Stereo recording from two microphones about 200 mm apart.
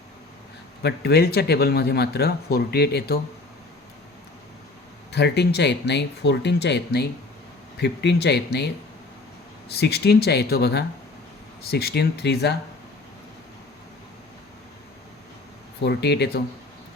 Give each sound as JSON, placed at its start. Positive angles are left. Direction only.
{"t": 0.8, "sound": "speech", "side_deg": 55}
{"t": 5.1, "sound": "speech", "side_deg": 55}
{"t": 15.8, "sound": "speech", "side_deg": 55}